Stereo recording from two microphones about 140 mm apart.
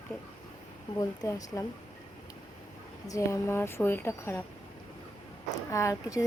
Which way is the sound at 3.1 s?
20° left (ahead or behind).